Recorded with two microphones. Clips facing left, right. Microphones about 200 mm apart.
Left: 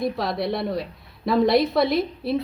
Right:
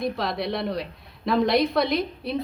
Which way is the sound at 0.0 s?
Centre (ahead or behind).